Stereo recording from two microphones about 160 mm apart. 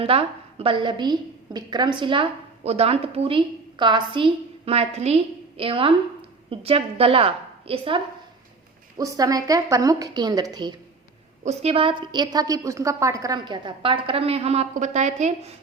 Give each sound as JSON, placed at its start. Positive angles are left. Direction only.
{"t": 0.0, "sound": "a woman's voice", "side_deg": -35}
{"t": 9.0, "sound": "a woman's voice", "side_deg": -20}
{"t": 11.4, "sound": "a woman's voice", "side_deg": -40}